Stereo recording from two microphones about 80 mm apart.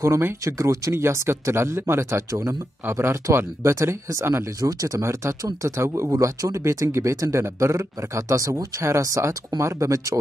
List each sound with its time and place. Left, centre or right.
0.0 s speech: right